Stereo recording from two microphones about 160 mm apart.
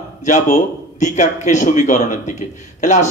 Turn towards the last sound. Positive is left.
turn(degrees=50)  # may be behind; listen again after turning